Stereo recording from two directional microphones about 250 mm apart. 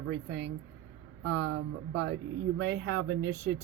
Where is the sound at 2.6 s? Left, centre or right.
Right.